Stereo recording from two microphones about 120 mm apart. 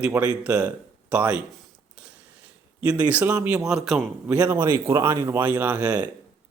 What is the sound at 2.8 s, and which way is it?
A man's voice, 10° right (ahead or behind).